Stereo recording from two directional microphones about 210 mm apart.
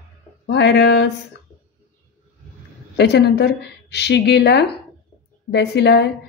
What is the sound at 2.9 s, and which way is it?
Speech, 55° left (ahead or behind).